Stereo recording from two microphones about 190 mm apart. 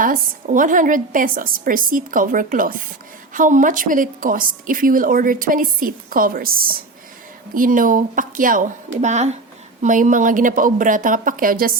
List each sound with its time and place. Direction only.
0.0 s a woman's voice: 45° right (ahead or behind)